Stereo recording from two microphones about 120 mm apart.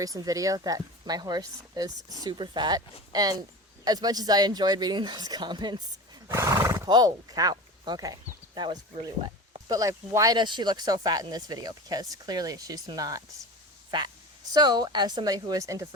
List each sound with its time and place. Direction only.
0.0 s speech: 30° right (ahead or behind)
6.2 s horse: 25° right (ahead or behind)
6.8 s speech: 35° right (ahead or behind)
10.3 s speech: 40° right (ahead or behind)
14.5 s speech: 35° right (ahead or behind)